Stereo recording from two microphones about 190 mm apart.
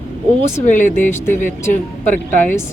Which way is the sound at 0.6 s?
40° left (ahead or behind).